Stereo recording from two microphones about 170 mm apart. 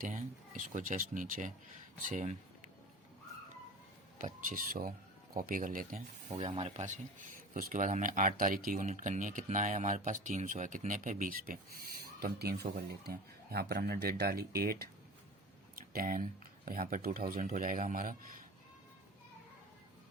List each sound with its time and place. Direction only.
0.0 s speech: 50° right (ahead or behind)
4.2 s speech: 55° right (ahead or behind)
6.3 s speech: 40° right (ahead or behind); by 14.8 s 65° right (ahead or behind)
15.7 s a sound: 60° right (ahead or behind)
16.6 s speech: 60° right (ahead or behind)